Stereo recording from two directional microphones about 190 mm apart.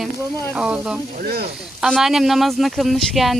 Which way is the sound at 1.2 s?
50° right (ahead or behind).